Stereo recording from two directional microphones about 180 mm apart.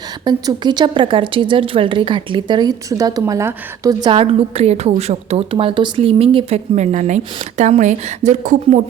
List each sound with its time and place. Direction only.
0.3 s speech: 25° right (ahead or behind); by 8.8 s 40° right (ahead or behind)